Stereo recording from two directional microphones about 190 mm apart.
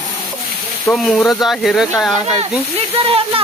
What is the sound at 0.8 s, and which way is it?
Speech, centre (ahead or behind).